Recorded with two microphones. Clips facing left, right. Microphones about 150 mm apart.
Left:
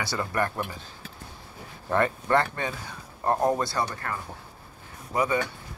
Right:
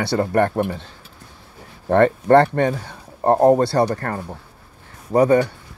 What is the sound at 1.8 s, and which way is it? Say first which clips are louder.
Speech: right 10 dB; 60° right (ahead or behind).